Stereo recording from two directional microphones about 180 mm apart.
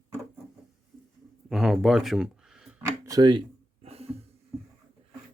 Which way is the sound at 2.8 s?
20° right (ahead or behind).